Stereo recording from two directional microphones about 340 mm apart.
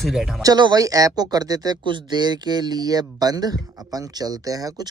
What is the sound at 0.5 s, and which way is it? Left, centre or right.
Speech, centre.